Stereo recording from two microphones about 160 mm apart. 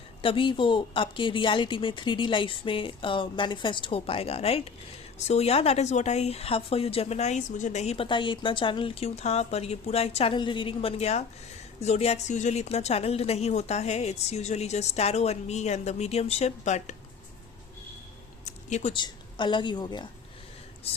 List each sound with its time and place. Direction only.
0.2 s speech: 35° left (ahead or behind)
18.4 s a sound: 45° left (ahead or behind)
19.0 s a woman's voice: 30° left (ahead or behind)